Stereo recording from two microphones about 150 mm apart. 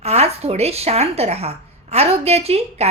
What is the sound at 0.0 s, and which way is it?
A woman's voice, 45° right (ahead or behind).